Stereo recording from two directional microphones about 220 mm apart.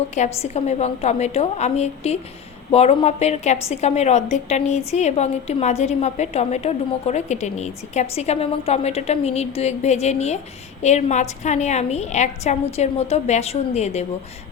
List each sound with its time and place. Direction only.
0.1 s a woman's voice: 30° left (ahead or behind)